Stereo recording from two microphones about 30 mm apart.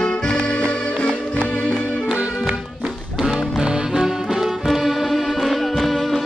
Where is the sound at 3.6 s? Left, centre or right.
Right.